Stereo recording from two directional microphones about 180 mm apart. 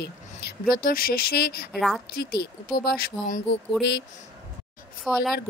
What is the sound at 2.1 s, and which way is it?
Speech, 60° left (ahead or behind).